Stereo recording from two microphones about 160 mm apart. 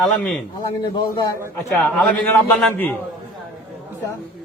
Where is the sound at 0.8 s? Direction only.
25° left (ahead or behind).